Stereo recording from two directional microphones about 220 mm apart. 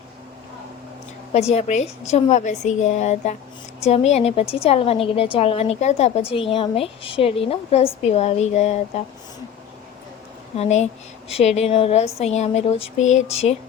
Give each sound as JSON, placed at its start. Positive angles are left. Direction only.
{"t": 1.3, "sound": "a woman's voice", "side_deg": 30}
{"t": 10.6, "sound": "a woman's voice", "side_deg": 30}